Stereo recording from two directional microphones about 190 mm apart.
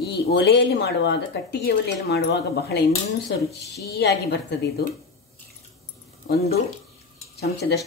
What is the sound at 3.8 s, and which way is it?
Speech, 60° left (ahead or behind).